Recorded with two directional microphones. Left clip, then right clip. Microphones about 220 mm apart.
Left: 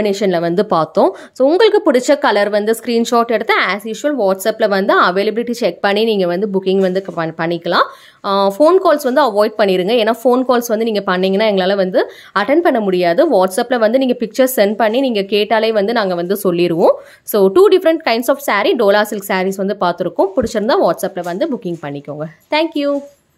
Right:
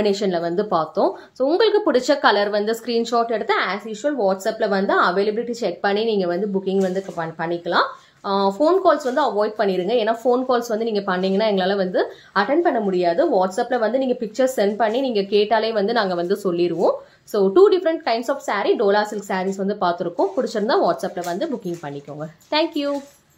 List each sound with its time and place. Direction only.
0.0 s speech: 30° left (ahead or behind)